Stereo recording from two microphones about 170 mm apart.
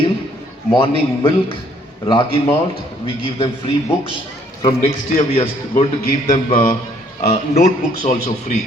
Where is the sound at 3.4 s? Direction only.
35° left (ahead or behind).